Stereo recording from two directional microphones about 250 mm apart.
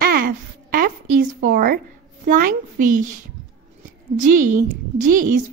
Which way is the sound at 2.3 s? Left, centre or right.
Right.